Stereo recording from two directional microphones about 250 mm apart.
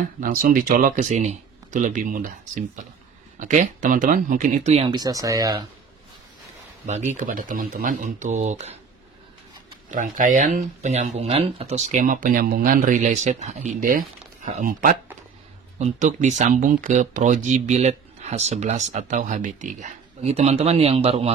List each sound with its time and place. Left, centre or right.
0.2 s speech: right; by 5.7 s centre
6.9 s speech: right
9.8 s speech: right